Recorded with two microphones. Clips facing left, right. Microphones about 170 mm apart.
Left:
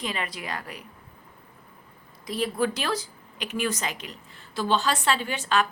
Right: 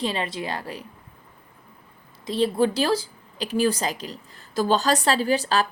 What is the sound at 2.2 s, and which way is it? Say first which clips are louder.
Speech: right 5 dB; 30° right (ahead or behind).